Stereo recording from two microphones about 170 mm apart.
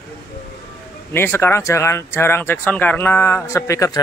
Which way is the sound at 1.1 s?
15° left (ahead or behind).